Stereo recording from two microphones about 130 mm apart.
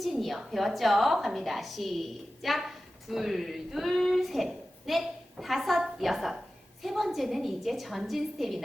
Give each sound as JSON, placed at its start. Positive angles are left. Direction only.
{"t": 0.0, "sound": "a woman's voice", "side_deg": 0}